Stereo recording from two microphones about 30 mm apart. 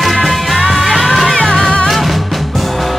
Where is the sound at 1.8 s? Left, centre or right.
Centre.